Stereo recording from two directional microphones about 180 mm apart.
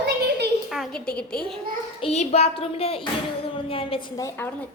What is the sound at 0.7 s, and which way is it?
Speech, centre (ahead or behind).